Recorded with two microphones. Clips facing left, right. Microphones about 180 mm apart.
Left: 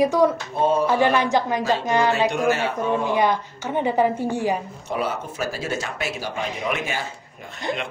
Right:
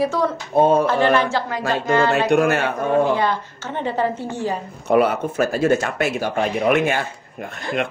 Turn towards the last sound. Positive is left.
turn(degrees=-60)  # may be behind; listen again after turning